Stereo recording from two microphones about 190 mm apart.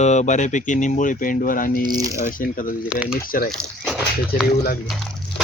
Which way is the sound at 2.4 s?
45° left (ahead or behind).